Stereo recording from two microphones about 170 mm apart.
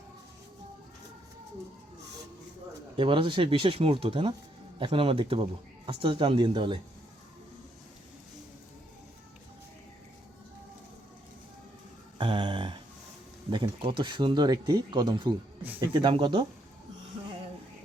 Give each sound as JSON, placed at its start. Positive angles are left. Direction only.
{"t": 2.9, "sound": "speech", "side_deg": -30}
{"t": 12.1, "sound": "a sound", "side_deg": -30}
{"t": 13.5, "sound": "speech", "side_deg": -30}